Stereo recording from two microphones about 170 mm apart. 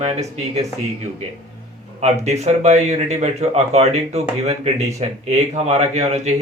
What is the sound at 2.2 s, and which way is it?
Speech, 40° right (ahead or behind).